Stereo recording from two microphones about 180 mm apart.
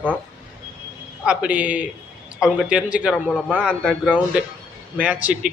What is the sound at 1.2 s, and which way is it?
A man's voice, 5° right (ahead or behind).